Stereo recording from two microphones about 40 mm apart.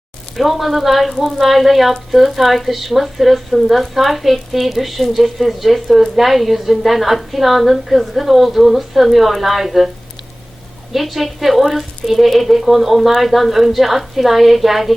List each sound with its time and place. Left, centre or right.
0.3 s speech: centre
10.9 s speech: centre